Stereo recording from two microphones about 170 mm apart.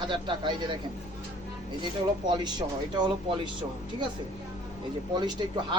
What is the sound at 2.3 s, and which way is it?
Speech, 25° right (ahead or behind).